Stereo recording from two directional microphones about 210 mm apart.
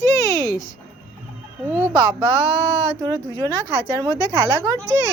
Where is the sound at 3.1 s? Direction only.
20° right (ahead or behind).